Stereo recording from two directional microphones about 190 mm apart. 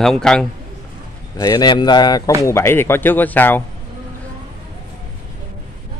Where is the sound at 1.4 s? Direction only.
20° left (ahead or behind).